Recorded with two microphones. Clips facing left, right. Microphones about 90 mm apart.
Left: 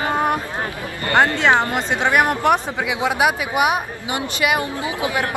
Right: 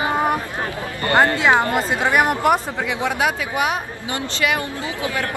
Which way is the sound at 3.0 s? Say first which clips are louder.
Left 3 dB; 15° left (ahead or behind).